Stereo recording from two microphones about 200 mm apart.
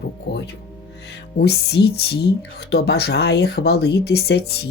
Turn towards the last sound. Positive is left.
turn(degrees=55)  # may be behind; listen again after turning